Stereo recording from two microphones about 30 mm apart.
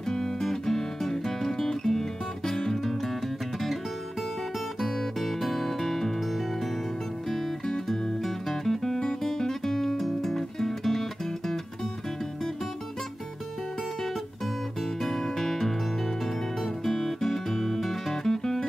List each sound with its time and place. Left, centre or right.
0.1 s music: centre
4.7 s music: centre
7.2 s music: centre
15.0 s music: centre
16.8 s music: centre